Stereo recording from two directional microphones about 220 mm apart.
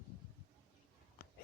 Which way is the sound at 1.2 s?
45° left (ahead or behind).